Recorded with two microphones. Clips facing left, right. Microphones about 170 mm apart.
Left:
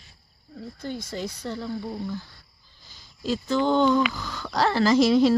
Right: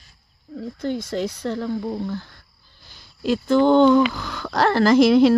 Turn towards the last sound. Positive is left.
turn(degrees=-60)  # may be behind; listen again after turning